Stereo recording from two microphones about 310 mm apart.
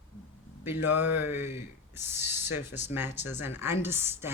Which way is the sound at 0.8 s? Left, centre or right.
Left.